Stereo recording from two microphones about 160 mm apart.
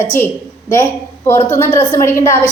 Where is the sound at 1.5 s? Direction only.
15° left (ahead or behind).